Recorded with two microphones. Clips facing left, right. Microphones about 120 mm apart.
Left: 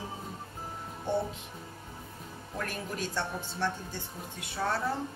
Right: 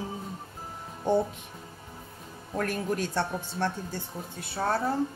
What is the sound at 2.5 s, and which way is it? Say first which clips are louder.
A woman's voice: right 7 dB; 50° right (ahead or behind).